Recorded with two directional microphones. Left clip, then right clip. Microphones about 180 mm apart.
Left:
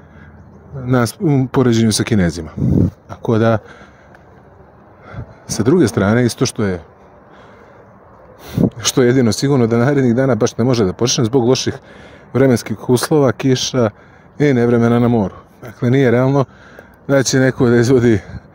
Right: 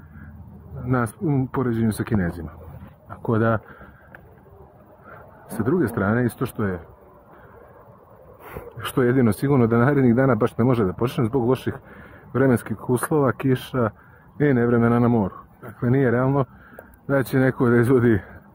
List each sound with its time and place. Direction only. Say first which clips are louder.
0.9 s speech: left 8 dB; 40° left (ahead or behind)
3.1 s speech: left 6 dB; 35° left (ahead or behind)
5.6 s speech: left 9 dB; 40° left (ahead or behind)
8.7 s speech: left 6 dB; 30° left (ahead or behind)
16.3 s a sound: left 7 dB; 35° left (ahead or behind)
17.2 s speech: left 6 dB; 30° left (ahead or behind)